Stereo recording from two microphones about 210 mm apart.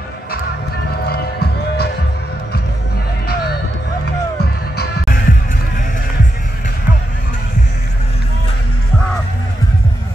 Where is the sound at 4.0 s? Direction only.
50° left (ahead or behind).